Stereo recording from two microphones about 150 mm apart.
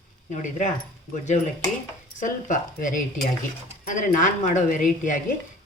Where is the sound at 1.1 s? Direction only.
55° left (ahead or behind).